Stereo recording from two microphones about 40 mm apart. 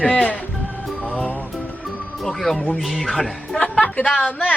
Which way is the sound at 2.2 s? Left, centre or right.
Centre.